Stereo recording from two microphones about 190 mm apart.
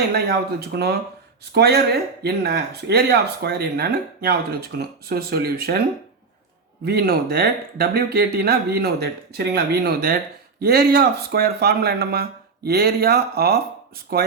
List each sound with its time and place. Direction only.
0.1 s speech: 55° right (ahead or behind)
6.8 s speech: 55° right (ahead or behind)